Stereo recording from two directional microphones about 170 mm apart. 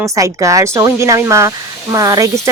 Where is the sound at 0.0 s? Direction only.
20° right (ahead or behind).